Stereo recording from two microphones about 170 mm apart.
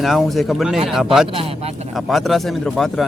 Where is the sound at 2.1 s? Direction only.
Centre (ahead or behind).